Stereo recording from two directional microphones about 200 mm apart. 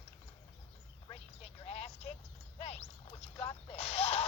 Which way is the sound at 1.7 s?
30° left (ahead or behind).